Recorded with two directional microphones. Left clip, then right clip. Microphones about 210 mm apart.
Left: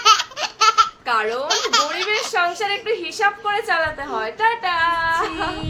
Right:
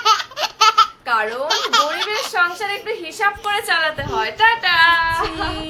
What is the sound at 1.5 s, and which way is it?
Speech, 15° right (ahead or behind).